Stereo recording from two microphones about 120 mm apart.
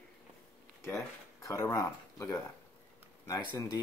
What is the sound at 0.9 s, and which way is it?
Speech, 25° left (ahead or behind).